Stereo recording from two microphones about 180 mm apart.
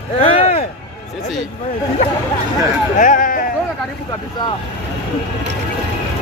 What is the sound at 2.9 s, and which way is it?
Speech, 45° left (ahead or behind).